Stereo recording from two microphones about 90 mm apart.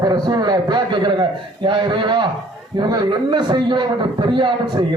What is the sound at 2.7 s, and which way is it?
A man's voice, 55° right (ahead or behind).